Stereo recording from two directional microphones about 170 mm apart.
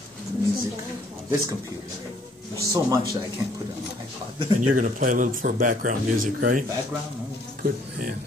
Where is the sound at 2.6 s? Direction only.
20° right (ahead or behind).